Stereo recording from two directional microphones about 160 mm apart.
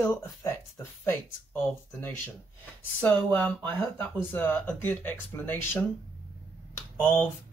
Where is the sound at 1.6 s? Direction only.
15° left (ahead or behind).